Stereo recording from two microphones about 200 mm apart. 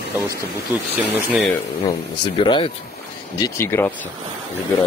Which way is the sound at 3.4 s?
10° left (ahead or behind).